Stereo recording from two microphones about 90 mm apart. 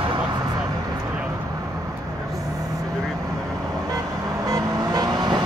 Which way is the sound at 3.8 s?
45° right (ahead or behind).